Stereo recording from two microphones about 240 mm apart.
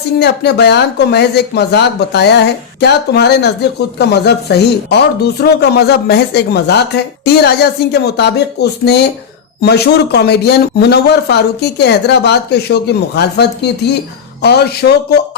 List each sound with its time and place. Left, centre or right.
0.2 s speech: left